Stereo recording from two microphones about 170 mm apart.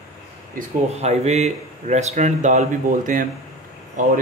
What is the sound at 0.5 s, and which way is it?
Speech, 40° right (ahead or behind).